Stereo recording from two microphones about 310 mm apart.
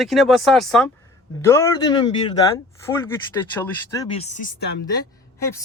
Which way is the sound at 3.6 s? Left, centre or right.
Centre.